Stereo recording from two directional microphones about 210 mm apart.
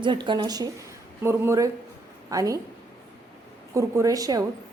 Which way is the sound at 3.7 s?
15° right (ahead or behind).